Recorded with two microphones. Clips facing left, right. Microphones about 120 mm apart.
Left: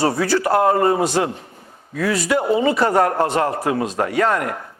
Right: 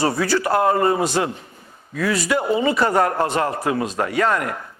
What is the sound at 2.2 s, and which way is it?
A man's voice, 50° left (ahead or behind).